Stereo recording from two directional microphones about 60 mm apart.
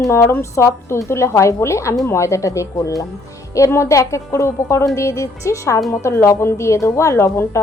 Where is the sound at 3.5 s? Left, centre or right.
Left.